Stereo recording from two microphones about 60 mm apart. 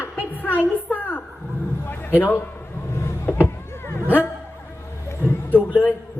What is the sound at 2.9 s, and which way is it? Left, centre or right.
Vehicle, left.